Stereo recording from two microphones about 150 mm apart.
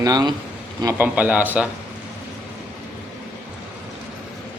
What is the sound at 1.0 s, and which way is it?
Speech, 10° right (ahead or behind).